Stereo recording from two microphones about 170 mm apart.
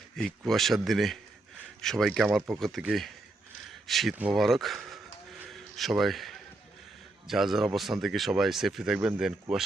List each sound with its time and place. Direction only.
0.2 s speech: 5° left (ahead or behind)
5.4 s a sound: centre (ahead or behind)
7.3 s speech: centre (ahead or behind)